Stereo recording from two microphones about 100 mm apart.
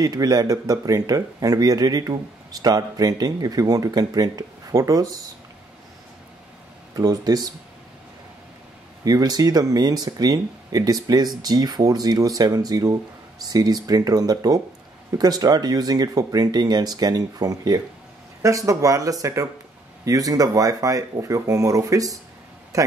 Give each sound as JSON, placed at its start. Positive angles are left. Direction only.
{"t": 0.0, "sound": "speech", "side_deg": -40}
{"t": 7.0, "sound": "speech", "side_deg": -40}
{"t": 9.0, "sound": "speech", "side_deg": -40}